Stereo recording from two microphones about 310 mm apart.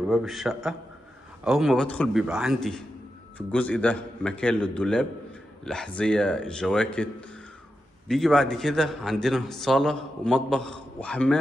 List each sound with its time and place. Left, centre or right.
0.1 s a man's voice: centre